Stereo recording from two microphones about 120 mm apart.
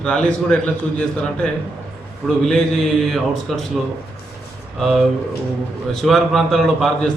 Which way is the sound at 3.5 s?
Centre (ahead or behind).